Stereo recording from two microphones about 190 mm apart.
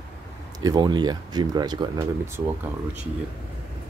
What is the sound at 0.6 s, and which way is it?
Speech, 20° right (ahead or behind).